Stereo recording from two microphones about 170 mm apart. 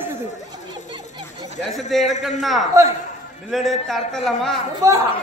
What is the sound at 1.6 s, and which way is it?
Speech, centre (ahead or behind).